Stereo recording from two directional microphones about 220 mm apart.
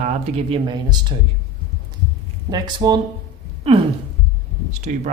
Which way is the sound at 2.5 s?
20° right (ahead or behind).